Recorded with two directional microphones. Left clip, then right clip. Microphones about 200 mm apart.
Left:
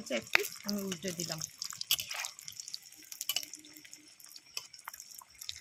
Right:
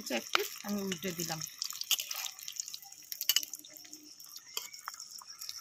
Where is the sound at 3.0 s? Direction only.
10° left (ahead or behind).